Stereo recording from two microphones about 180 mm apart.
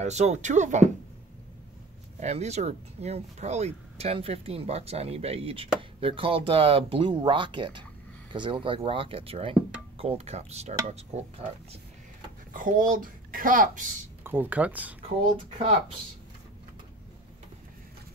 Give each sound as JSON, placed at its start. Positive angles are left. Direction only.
{"t": 0.0, "sound": "speech", "side_deg": -40}
{"t": 2.1, "sound": "speech", "side_deg": -40}
{"t": 12.5, "sound": "speech", "side_deg": -50}
{"t": 14.2, "sound": "speech", "side_deg": -10}